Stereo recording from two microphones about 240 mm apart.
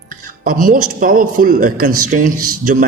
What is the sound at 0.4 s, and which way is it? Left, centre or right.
Speech, right.